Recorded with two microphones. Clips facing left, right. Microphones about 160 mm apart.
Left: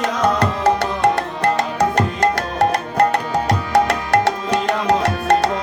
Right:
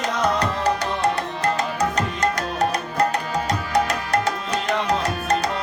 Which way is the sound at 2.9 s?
65° left (ahead or behind).